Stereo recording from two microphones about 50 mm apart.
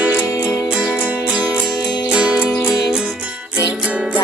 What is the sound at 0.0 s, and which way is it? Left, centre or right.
Music, right.